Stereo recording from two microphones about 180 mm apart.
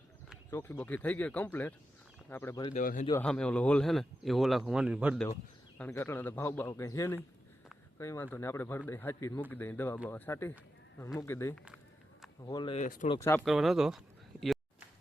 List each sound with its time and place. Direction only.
0.5 s speech: 10° left (ahead or behind)
2.6 s speech: 45° left (ahead or behind)
3.2 s speech: 5° left (ahead or behind)
5.7 s speech: 10° left (ahead or behind)
12.7 s speech: 45° left (ahead or behind)
13.1 s speech: 15° left (ahead or behind)
13.4 s speech: centre (ahead or behind)